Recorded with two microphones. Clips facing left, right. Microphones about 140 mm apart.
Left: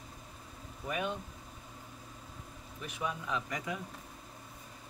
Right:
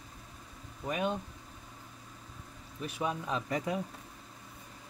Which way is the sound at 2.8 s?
30° right (ahead or behind).